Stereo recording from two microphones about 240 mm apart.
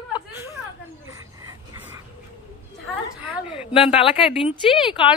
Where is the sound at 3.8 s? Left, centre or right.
Left.